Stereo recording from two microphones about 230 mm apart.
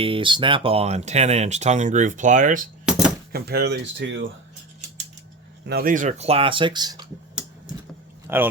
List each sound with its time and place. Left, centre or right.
0.0 s speech: right
5.6 s speech: right; by 7.0 s centre
8.3 s speech: centre